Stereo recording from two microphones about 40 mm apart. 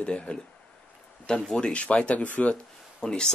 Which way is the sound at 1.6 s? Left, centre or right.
Left.